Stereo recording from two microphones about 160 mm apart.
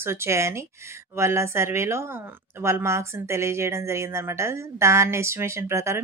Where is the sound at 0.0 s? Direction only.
15° right (ahead or behind).